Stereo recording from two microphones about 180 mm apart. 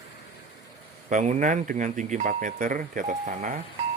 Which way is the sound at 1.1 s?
45° right (ahead or behind).